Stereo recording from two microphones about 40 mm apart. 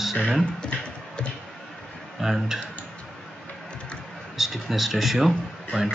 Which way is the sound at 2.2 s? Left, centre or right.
Centre.